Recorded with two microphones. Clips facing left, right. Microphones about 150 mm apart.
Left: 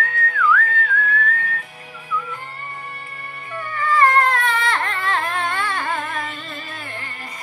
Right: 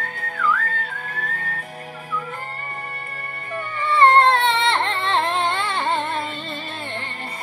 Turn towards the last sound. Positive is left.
turn(degrees=-25)  # may be behind; listen again after turning